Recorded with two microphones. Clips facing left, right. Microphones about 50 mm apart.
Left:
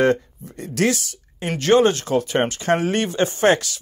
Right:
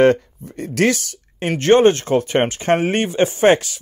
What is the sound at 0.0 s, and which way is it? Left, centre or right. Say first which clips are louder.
Speech: right 4 dB; right.